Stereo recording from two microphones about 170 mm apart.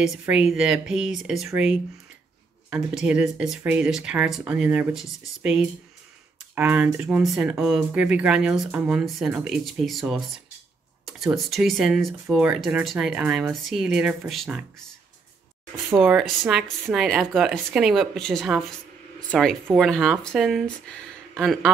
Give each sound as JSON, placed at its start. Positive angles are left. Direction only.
{"t": 0.2, "sound": "speech", "side_deg": -5}
{"t": 16.0, "sound": "speech", "side_deg": -5}